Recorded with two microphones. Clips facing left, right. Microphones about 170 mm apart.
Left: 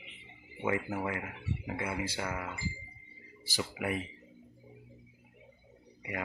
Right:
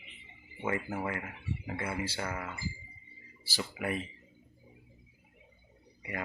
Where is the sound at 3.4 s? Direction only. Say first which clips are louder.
Left 1 dB; 15° left (ahead or behind).